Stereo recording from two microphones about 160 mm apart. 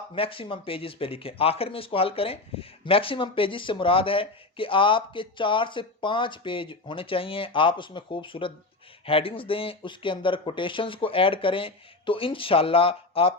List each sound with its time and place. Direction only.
0.1 s speech: 35° left (ahead or behind)